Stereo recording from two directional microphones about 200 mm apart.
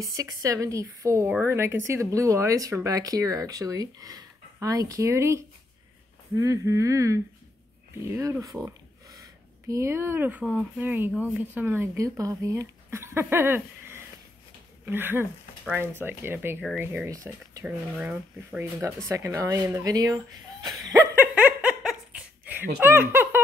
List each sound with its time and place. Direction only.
0.0 s a woman's voice: 15° right (ahead or behind)
21.1 s giggle: 10° right (ahead or behind)